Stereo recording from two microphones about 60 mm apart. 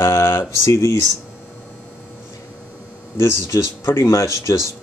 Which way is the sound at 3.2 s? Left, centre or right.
Left.